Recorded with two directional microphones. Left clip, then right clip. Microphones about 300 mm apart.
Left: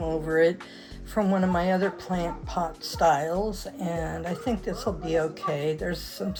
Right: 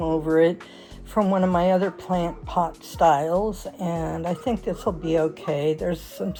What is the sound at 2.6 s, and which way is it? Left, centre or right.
Speech, right.